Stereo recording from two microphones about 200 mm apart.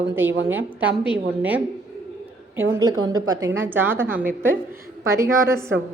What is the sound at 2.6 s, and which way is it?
A woman's voice, 15° right (ahead or behind).